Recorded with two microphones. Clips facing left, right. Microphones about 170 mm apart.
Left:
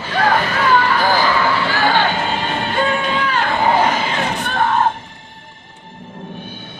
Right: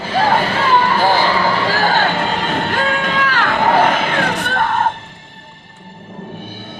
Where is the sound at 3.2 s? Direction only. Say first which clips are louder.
Right 1 dB; 70° right (ahead or behind); by 4.8 s 55° right (ahead or behind).